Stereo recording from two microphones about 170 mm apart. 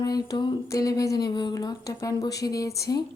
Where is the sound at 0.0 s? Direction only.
25° left (ahead or behind).